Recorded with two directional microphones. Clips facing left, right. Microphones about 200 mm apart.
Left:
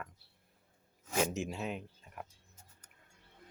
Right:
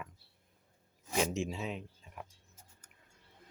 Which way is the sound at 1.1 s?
5° left (ahead or behind).